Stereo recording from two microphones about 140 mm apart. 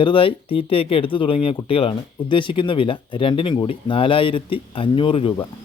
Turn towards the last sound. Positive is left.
turn(degrees=40)  # may be behind; listen again after turning